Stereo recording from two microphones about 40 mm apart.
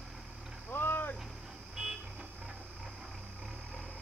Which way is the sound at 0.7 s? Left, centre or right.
Left.